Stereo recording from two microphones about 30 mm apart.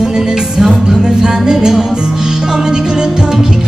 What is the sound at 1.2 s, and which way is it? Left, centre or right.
Music, right.